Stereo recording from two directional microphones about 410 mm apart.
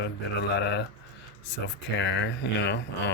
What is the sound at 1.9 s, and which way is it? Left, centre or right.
Speech, left.